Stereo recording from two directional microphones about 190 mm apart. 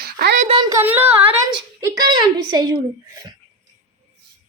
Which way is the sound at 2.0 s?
20° right (ahead or behind).